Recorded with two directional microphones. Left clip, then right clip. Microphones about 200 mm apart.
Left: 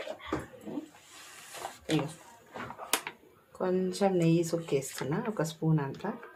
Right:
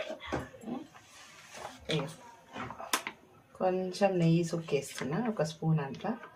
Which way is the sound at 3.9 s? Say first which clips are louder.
Left 1 dB; 35° left (ahead or behind).